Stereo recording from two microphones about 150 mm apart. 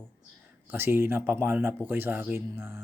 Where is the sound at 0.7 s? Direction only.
15° right (ahead or behind).